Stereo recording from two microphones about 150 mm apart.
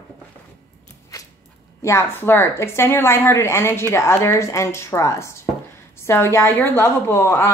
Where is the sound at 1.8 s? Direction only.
20° left (ahead or behind).